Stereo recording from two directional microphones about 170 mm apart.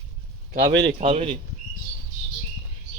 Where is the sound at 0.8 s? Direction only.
35° right (ahead or behind).